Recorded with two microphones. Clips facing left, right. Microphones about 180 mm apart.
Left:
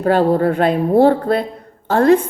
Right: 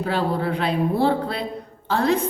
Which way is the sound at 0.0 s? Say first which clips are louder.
Left 9 dB; 50° left (ahead or behind).